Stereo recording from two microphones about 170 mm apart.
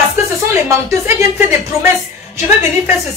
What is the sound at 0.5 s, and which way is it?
Speech, 15° right (ahead or behind).